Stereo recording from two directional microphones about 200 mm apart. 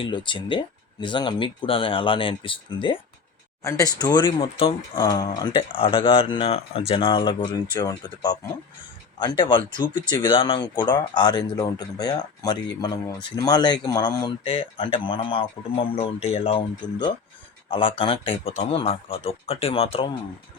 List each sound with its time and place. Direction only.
0.0 s speech: 25° left (ahead or behind)